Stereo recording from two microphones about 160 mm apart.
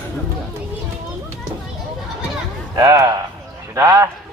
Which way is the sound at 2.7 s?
20° right (ahead or behind).